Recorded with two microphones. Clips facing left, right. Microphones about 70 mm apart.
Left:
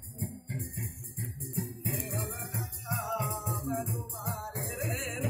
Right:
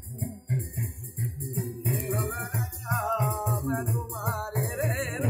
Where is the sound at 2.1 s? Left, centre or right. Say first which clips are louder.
Right 7 dB; right.